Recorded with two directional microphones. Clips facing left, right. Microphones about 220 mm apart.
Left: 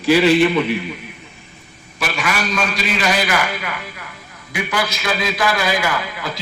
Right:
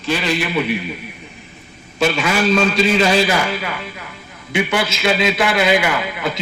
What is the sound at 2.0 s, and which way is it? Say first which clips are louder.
A man's voice: right 6 dB; 25° right (ahead or behind).